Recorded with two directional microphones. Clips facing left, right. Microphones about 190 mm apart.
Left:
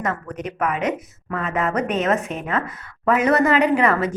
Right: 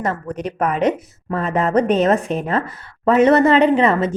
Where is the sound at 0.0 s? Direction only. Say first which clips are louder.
Right 3 dB; 30° right (ahead or behind).